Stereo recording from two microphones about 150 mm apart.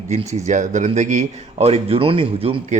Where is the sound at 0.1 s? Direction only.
50° right (ahead or behind).